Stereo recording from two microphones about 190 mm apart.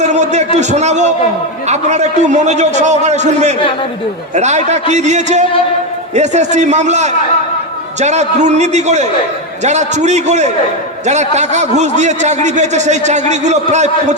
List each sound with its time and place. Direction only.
0.0 s a man's voice: 35° right (ahead or behind)